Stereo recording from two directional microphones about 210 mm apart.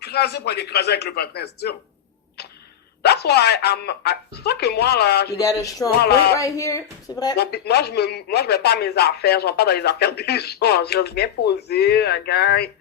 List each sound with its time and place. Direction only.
0.0 s speech: 50° left (ahead or behind)
3.0 s speech: 50° left (ahead or behind)
5.4 s speech: 15° left (ahead or behind)
6.0 s speech: 50° left (ahead or behind)
6.4 s speech: 15° left (ahead or behind)
7.3 s speech: 50° left (ahead or behind)